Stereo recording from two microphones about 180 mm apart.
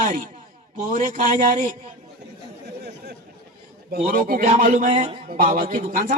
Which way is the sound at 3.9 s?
55° right (ahead or behind).